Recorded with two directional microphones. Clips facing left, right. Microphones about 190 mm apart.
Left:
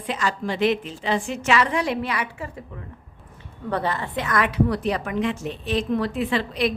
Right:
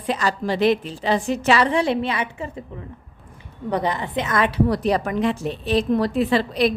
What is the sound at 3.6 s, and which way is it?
A woman's voice, 15° right (ahead or behind).